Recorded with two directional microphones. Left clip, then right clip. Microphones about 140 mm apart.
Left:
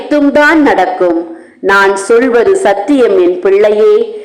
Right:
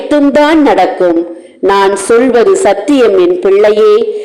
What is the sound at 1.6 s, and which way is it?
A woman's voice, 25° right (ahead or behind).